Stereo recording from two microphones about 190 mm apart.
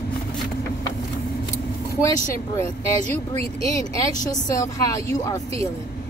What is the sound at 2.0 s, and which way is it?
Speech, 15° left (ahead or behind).